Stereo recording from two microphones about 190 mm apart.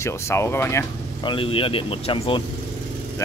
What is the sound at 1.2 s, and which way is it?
Speech, 25° left (ahead or behind).